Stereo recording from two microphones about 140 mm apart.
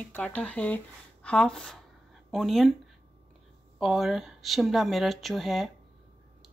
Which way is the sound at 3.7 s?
Centre (ahead or behind).